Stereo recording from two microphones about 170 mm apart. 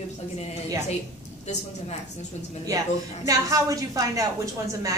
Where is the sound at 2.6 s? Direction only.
20° right (ahead or behind).